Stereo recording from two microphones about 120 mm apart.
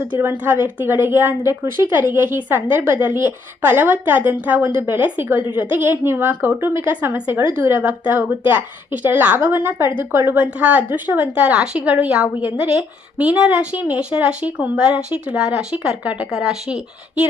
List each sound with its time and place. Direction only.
0.2 s a woman's voice: 20° right (ahead or behind)